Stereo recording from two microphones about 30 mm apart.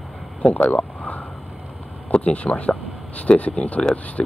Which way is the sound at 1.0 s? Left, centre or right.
Left.